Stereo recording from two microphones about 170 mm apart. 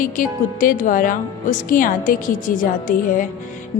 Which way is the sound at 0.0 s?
55° left (ahead or behind).